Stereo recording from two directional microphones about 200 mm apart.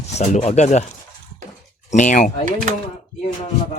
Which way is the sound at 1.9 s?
40° left (ahead or behind).